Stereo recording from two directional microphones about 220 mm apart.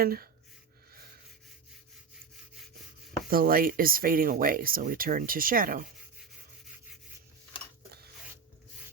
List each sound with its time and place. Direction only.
0.0 s speech: 45° right (ahead or behind)
3.2 s speech: 40° right (ahead or behind)